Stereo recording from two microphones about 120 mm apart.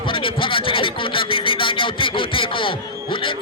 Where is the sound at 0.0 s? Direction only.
45° left (ahead or behind).